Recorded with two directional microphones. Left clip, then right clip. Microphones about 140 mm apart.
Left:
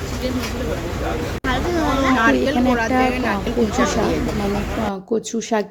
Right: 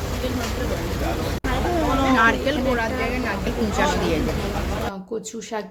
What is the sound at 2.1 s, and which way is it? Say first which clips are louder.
A woman's voice: left 1 dB; 5° left (ahead or behind).